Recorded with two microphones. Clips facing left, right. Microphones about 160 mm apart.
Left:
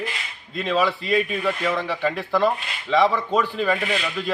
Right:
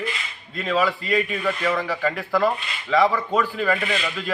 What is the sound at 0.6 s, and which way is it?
A man's voice, centre (ahead or behind).